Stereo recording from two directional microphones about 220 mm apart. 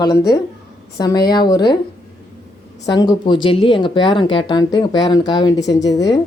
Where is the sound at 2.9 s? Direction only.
20° left (ahead or behind).